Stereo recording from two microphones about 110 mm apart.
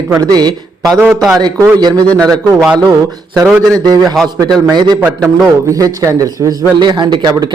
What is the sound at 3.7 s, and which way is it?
Speech, 35° right (ahead or behind).